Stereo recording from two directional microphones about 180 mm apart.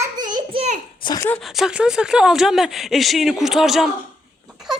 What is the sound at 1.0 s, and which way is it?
Speech, 20° left (ahead or behind).